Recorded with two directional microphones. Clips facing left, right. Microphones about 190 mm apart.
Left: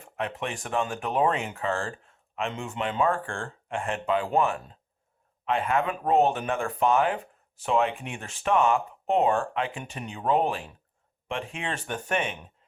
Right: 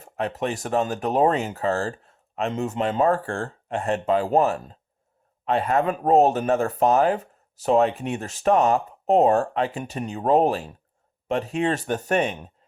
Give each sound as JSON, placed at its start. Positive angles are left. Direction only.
{"t": 0.0, "sound": "speech", "side_deg": -40}